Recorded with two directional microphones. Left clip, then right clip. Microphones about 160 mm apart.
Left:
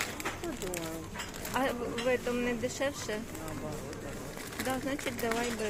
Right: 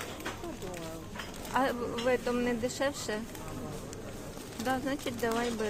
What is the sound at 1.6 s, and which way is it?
Speech, 15° right (ahead or behind).